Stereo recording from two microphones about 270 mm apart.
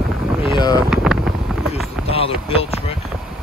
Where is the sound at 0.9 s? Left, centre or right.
Centre.